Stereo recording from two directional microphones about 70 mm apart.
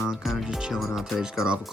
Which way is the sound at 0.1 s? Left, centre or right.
Centre.